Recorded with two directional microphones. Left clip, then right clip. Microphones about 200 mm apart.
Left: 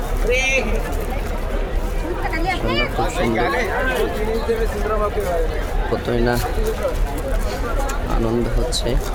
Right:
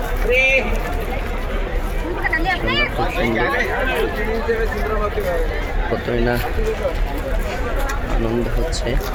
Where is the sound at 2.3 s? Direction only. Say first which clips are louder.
Right 2 dB; 25° right (ahead or behind).